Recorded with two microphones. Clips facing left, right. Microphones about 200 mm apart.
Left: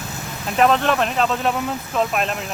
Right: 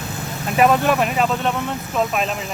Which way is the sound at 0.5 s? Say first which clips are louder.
Right 1 dB; 10° right (ahead or behind).